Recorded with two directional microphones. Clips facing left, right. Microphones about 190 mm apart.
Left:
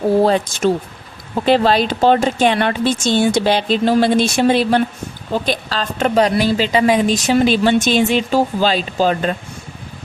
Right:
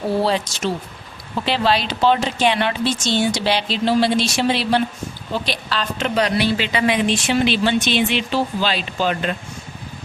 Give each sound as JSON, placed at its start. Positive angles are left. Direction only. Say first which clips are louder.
{"t": 0.2, "sound": "a woman's voice", "louder": "left 6 dB", "side_deg": 50}